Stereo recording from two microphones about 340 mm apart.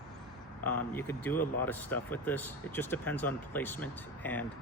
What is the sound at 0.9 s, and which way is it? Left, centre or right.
Speech, centre.